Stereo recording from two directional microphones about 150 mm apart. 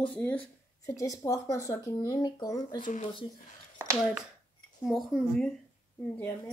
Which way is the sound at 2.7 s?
60° left (ahead or behind).